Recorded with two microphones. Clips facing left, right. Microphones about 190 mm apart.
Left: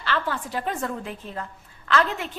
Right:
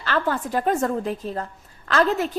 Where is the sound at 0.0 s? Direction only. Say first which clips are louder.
Right 4 dB; 45° right (ahead or behind).